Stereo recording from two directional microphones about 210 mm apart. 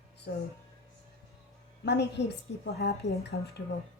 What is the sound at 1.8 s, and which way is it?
A woman's voice, 55° left (ahead or behind).